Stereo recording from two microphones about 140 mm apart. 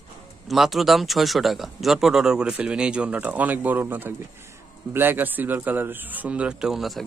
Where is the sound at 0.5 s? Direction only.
Centre (ahead or behind).